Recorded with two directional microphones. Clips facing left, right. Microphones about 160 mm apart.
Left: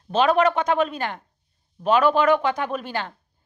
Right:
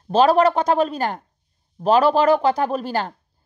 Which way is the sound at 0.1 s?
35° right (ahead or behind).